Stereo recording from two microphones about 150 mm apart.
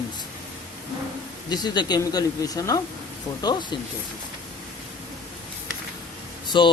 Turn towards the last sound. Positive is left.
turn(degrees=30)  # may be behind; listen again after turning